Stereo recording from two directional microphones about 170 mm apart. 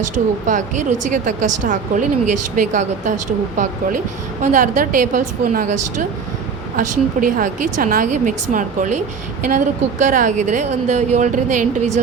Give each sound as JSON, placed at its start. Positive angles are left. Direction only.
{"t": 0.4, "sound": "speech", "side_deg": -45}
{"t": 4.4, "sound": "speech", "side_deg": -45}